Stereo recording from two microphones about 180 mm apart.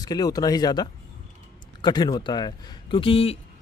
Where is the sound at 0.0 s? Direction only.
20° left (ahead or behind).